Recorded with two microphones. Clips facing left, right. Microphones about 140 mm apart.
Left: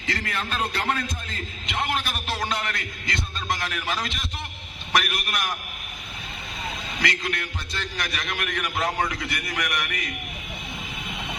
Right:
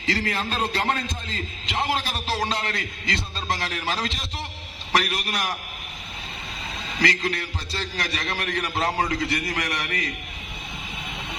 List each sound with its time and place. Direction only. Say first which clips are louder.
0.0 s a man's voice: right 4 dB; 30° right (ahead or behind)
7.0 s a man's voice: right 4 dB; 35° right (ahead or behind)